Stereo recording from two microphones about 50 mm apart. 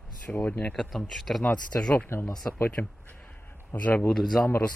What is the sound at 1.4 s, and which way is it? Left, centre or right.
Speech, left.